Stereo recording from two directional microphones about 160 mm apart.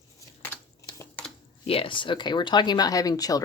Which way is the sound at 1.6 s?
35° left (ahead or behind).